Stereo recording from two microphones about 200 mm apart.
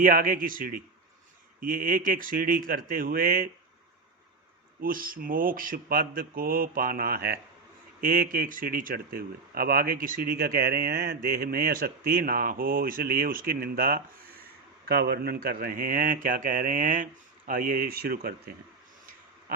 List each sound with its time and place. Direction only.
0.0 s speech: 45° right (ahead or behind)
4.8 s speech: 45° right (ahead or behind)